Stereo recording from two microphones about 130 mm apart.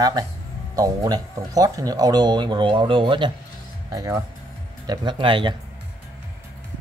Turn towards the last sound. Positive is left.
turn(degrees=-40)  # may be behind; listen again after turning